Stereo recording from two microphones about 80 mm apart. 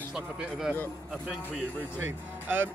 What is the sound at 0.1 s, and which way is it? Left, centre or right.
Speech, centre.